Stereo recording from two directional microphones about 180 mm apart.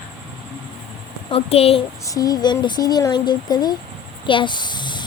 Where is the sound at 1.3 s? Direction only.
35° left (ahead or behind).